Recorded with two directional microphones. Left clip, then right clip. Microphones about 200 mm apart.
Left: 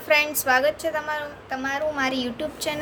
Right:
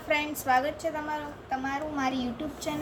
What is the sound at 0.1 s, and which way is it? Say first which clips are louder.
A woman's voice: left 6 dB; 50° left (ahead or behind).